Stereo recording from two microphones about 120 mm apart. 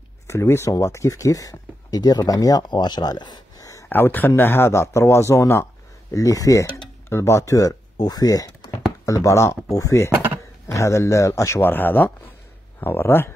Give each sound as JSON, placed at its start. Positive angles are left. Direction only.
{"t": 0.3, "sound": "speech", "side_deg": 25}
{"t": 3.9, "sound": "speech", "side_deg": 15}